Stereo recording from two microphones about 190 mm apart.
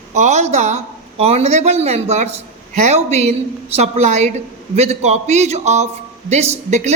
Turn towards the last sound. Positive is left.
turn(degrees=-35)  # may be behind; listen again after turning